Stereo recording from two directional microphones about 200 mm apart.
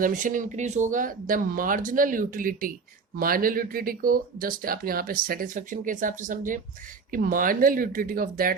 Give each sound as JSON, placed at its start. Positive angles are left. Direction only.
{"t": 0.0, "sound": "speech", "side_deg": -40}